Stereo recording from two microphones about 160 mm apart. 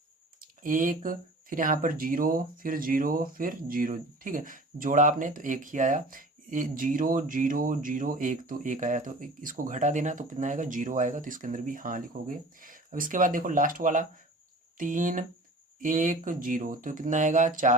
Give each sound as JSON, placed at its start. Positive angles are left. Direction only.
{"t": 0.6, "sound": "speech", "side_deg": -55}